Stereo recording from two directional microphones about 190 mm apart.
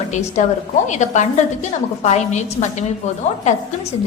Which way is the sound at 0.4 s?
40° left (ahead or behind).